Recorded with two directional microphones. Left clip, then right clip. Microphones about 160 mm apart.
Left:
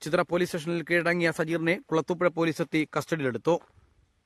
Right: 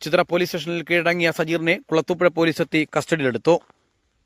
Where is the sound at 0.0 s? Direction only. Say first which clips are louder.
Right 7 dB; 20° right (ahead or behind).